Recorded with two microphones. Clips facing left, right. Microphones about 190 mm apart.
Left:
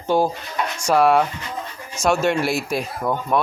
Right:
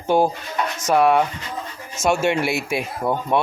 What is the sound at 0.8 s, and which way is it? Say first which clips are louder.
Speech: even; centre (ahead or behind).